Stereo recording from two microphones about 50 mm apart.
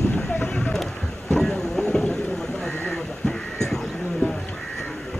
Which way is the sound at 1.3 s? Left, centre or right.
Centre.